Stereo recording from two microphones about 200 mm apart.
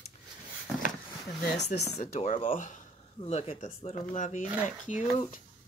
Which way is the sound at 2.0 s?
35° left (ahead or behind).